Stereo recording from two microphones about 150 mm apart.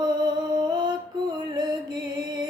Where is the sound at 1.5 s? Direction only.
30° right (ahead or behind).